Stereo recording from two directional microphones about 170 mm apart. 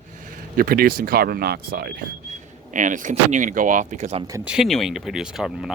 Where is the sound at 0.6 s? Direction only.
60° right (ahead or behind).